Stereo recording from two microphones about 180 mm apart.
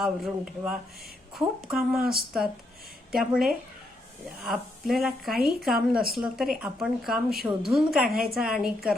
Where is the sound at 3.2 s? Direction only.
Centre (ahead or behind).